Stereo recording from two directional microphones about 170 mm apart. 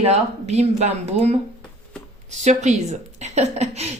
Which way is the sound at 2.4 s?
45° right (ahead or behind).